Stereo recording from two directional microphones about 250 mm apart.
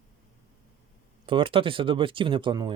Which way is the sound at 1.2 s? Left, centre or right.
Right.